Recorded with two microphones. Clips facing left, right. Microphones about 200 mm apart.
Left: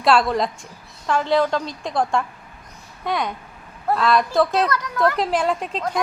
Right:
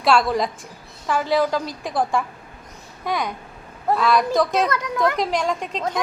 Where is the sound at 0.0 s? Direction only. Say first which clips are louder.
Left 1 dB; centre (ahead or behind).